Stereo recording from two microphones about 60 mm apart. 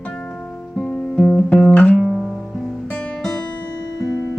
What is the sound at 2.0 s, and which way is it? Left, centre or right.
Music, centre.